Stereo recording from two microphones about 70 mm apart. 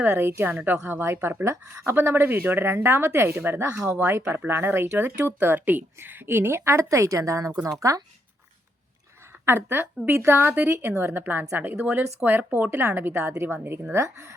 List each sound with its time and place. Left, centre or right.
0.1 s a woman's voice: right
0.4 s a woman's voice: right
4.2 s speech: centre
4.4 s a woman's voice: right
9.5 s a woman's voice: right
13.9 s speech: right